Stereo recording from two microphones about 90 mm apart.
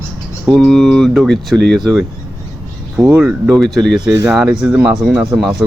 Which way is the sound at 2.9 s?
10° right (ahead or behind).